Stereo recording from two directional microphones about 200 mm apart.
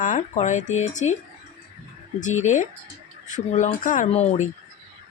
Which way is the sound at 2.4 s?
40° left (ahead or behind).